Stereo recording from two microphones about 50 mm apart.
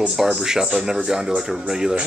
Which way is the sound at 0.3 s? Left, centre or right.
Centre.